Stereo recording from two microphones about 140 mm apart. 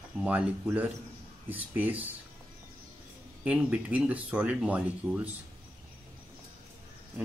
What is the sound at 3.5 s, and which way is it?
Speech, 10° right (ahead or behind).